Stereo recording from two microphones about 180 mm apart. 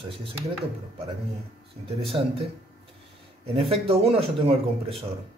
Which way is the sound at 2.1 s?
25° right (ahead or behind).